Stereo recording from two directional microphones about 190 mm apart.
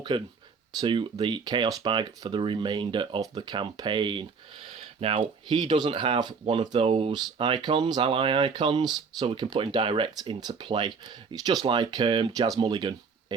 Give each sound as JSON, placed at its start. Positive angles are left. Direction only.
{"t": 0.1, "sound": "speech", "side_deg": -25}